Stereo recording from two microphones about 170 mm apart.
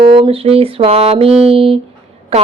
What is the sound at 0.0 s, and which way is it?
Speech, 30° right (ahead or behind).